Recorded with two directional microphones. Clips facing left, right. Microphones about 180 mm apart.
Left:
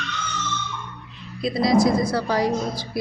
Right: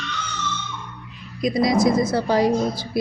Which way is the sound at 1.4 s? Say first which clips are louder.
Even; 20° right (ahead or behind).